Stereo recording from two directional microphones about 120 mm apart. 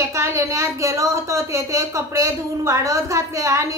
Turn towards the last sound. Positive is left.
turn(degrees=-25)  # may be behind; listen again after turning